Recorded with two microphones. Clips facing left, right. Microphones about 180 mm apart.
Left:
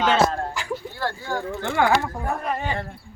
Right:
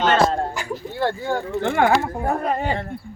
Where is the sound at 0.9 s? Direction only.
20° right (ahead or behind).